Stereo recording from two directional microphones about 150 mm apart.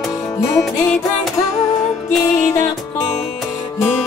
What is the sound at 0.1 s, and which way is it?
Music, 20° left (ahead or behind).